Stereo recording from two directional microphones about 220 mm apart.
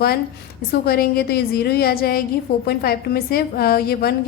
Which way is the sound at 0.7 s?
45° left (ahead or behind).